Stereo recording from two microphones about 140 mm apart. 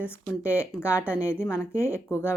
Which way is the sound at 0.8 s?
20° left (ahead or behind).